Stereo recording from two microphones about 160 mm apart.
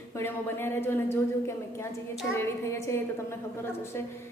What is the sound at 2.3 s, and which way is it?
Speech, 20° left (ahead or behind).